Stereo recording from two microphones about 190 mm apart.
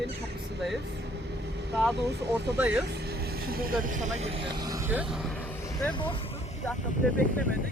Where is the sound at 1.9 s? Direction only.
60° right (ahead or behind).